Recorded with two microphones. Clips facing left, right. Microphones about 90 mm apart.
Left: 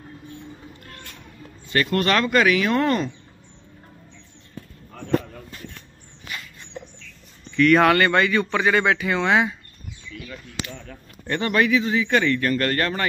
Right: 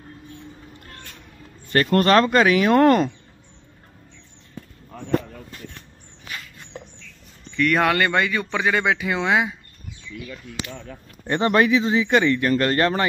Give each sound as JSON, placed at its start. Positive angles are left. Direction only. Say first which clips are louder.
{"t": 1.7, "sound": "speech", "louder": "right 4 dB", "side_deg": -40}
{"t": 7.5, "sound": "speech", "louder": "left 4 dB", "side_deg": -5}
{"t": 11.2, "sound": "a man's voice", "louder": "right 3 dB", "side_deg": -25}